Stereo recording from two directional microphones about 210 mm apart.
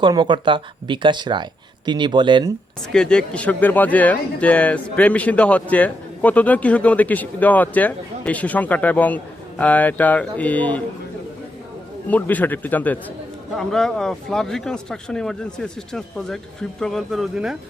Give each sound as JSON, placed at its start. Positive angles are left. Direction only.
{"t": 0.0, "sound": "speech", "side_deg": -20}
{"t": 2.9, "sound": "speech", "side_deg": 5}
{"t": 12.0, "sound": "speech", "side_deg": 5}